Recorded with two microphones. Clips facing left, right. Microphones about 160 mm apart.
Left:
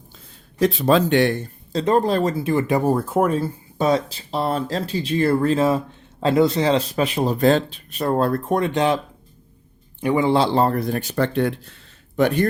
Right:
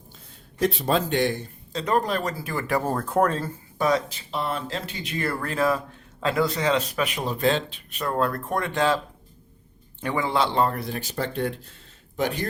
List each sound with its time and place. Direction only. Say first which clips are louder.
0.6 s speech: left 6 dB; 90° left; by 1.4 s 70° left (ahead or behind)
1.7 s speech: left 6 dB; 25° left (ahead or behind); by 3.5 s 10° left (ahead or behind)
3.8 s speech: left 4 dB; 30° left (ahead or behind)
10.0 s speech: left 7 dB; 15° left (ahead or behind)
10.2 s speech: left 3 dB; 30° left (ahead or behind); by 11.5 s 70° left (ahead or behind)
12.1 s speech: left 8 dB; 60° left (ahead or behind)